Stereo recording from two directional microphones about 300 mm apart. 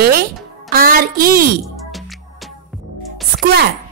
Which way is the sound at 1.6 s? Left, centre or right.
Centre.